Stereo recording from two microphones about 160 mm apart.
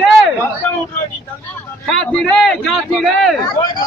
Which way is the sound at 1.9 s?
5° left (ahead or behind).